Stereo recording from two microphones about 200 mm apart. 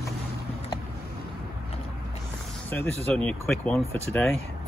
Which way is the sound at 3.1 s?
5° left (ahead or behind).